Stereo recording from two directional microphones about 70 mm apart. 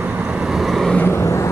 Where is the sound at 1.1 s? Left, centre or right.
Left.